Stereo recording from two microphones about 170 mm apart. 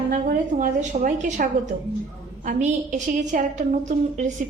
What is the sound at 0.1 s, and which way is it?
A woman's voice, 50° right (ahead or behind).